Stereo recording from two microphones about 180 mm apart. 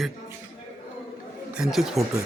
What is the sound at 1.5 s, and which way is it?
Speech, 5° right (ahead or behind).